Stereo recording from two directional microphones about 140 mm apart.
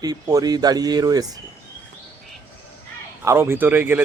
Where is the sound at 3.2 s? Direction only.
20° right (ahead or behind).